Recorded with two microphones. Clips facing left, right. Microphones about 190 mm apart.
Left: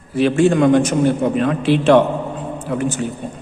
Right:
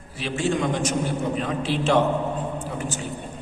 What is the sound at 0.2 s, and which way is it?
A man's voice, 55° left (ahead or behind).